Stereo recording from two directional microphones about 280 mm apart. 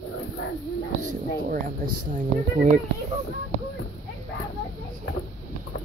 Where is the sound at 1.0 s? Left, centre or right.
Right.